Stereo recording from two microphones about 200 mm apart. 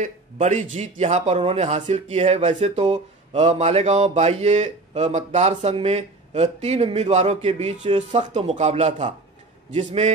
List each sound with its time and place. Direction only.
0.0 s speech: 35° right (ahead or behind)